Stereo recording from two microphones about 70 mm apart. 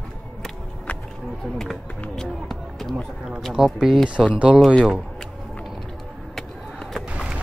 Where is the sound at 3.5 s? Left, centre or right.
Centre.